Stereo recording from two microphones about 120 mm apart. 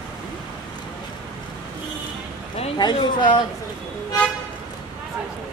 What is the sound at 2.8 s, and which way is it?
Speech, 40° left (ahead or behind).